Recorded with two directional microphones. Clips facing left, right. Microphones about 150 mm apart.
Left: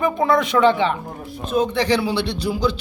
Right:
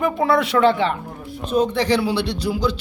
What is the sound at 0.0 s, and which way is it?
Speech, 5° right (ahead or behind).